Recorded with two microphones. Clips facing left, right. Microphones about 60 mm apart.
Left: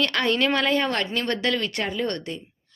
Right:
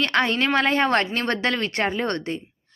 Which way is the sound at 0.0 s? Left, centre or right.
Right.